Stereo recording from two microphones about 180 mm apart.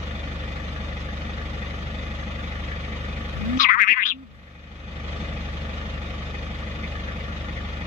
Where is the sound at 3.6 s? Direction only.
50° left (ahead or behind).